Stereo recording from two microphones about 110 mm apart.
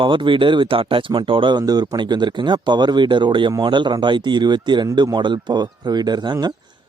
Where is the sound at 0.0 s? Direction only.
50° right (ahead or behind).